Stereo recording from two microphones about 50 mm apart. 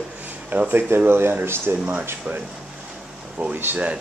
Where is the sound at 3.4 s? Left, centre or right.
Right.